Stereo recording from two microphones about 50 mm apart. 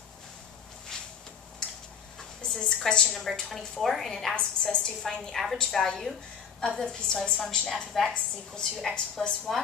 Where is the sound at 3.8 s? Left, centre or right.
Centre.